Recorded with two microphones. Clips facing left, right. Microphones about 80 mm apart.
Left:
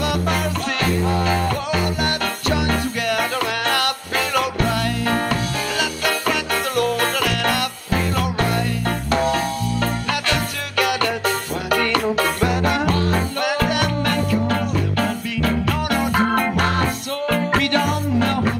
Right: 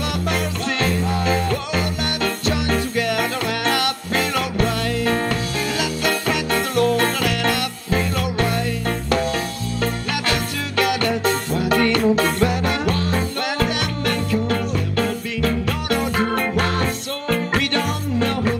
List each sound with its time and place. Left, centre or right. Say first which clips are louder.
0.0 s music: left 2 dB; left
4.6 s music: even; left
6.0 s music: even; right
8.1 s music: left 1 dB; left
11.2 s music: right 2 dB; right
12.4 s music: left 1 dB; left